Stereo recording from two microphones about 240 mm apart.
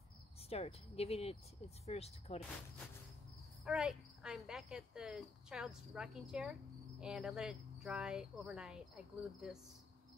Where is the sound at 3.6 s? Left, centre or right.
Centre.